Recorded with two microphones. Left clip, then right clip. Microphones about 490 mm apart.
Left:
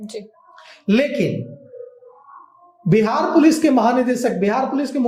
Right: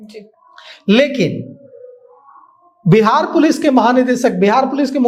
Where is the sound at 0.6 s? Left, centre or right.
Right.